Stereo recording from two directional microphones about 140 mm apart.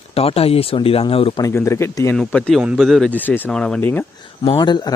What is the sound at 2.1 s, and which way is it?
Speech, 5° left (ahead or behind).